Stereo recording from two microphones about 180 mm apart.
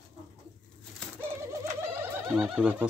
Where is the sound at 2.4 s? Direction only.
5° right (ahead or behind).